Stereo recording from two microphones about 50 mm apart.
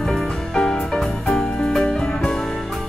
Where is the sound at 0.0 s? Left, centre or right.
Centre.